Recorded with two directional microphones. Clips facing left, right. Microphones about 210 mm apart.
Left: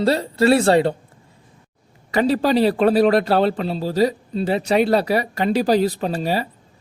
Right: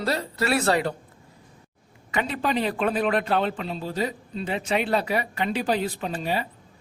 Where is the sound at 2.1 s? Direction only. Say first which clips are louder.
Left 9 dB; 35° left (ahead or behind).